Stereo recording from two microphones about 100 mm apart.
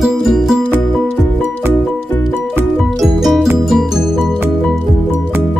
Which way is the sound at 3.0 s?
Centre (ahead or behind).